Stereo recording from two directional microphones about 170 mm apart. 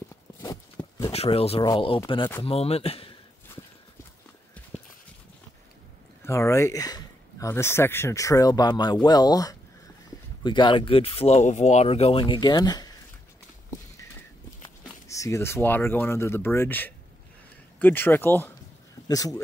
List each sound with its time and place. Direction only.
0.3 s a sound: 15° left (ahead or behind)
1.1 s speech: 35° left (ahead or behind)
6.2 s speech: 15° left (ahead or behind)
14.6 s speech: 20° left (ahead or behind)